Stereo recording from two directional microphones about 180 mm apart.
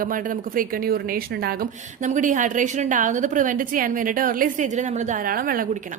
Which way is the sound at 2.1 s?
45° right (ahead or behind).